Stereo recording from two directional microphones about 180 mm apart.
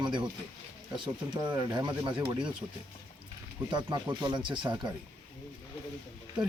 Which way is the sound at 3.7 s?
25° right (ahead or behind).